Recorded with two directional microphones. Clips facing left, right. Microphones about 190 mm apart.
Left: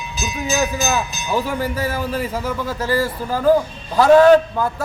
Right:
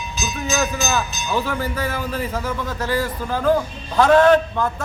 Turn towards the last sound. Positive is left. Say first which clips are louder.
# left 3 dB
turn(degrees=10)  # may be behind; listen again after turning